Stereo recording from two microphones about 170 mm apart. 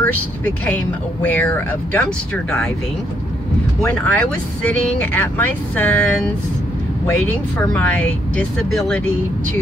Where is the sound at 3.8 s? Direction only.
10° left (ahead or behind).